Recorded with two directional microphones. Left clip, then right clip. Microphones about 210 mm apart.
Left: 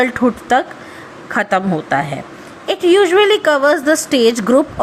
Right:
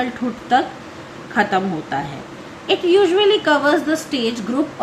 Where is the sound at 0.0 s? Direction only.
50° left (ahead or behind).